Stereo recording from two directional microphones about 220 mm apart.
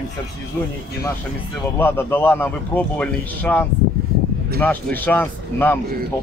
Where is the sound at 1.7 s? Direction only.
10° left (ahead or behind).